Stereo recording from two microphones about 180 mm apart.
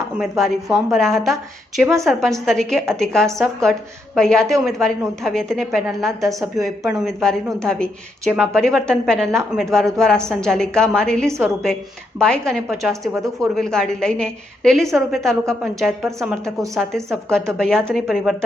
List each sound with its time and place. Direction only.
0.2 s speech: centre (ahead or behind)
13.1 s speech: 20° right (ahead or behind)
13.6 s speech: 5° left (ahead or behind)